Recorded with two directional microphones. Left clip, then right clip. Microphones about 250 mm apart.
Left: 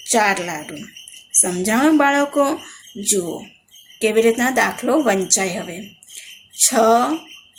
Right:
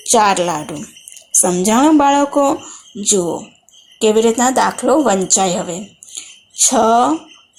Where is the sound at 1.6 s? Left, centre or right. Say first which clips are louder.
Right 3 dB; centre.